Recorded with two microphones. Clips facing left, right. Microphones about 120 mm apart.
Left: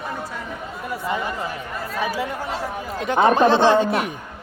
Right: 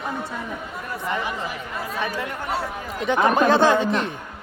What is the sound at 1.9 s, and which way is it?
Speech, 5° left (ahead or behind).